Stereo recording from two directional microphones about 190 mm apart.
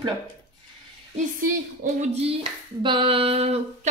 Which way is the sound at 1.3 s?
45° right (ahead or behind).